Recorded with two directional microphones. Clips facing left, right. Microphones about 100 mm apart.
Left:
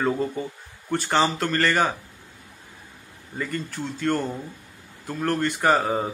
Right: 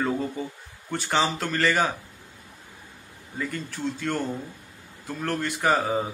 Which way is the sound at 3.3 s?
Centre (ahead or behind).